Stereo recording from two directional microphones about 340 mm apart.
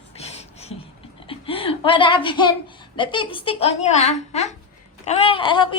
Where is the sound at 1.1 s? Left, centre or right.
Centre.